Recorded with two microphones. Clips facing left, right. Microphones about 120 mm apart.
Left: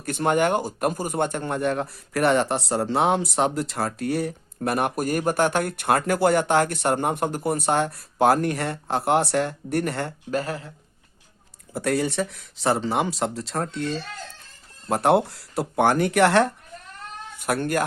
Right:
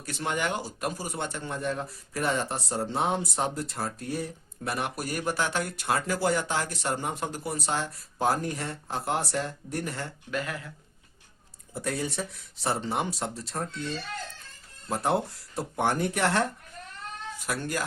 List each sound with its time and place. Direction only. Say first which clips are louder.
0.0 s a man's voice: left 9 dB; 50° left (ahead or behind)
10.3 s speech: left 6 dB; 35° left (ahead or behind)
11.7 s speech: left 8 dB; 75° left (ahead or behind)
14.8 s speech: left 8 dB; 70° left (ahead or behind)
17.4 s speech: left 8 dB; 60° left (ahead or behind)